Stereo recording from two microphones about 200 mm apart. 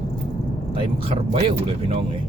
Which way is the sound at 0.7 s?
25° right (ahead or behind).